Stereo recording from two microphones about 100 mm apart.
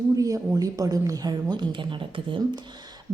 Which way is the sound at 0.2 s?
35° right (ahead or behind).